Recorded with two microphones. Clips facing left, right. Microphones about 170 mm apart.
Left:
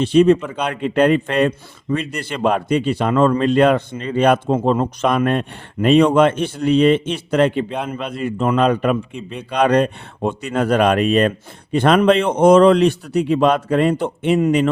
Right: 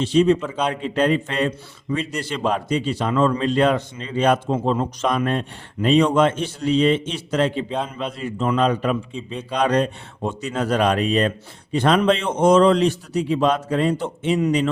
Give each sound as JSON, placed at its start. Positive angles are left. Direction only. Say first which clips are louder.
{"t": 0.0, "sound": "a man's voice", "louder": "left 4 dB", "side_deg": 55}
{"t": 0.4, "sound": "a man's voice", "louder": "even", "side_deg": 10}
{"t": 0.7, "sound": "a man's voice", "louder": "left 6 dB", "side_deg": 60}